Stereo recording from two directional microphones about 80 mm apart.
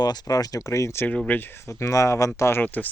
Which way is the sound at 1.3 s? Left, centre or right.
Left.